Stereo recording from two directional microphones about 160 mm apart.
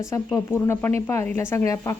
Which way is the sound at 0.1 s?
15° left (ahead or behind).